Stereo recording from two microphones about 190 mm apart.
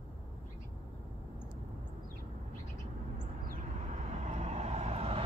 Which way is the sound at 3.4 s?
45° right (ahead or behind).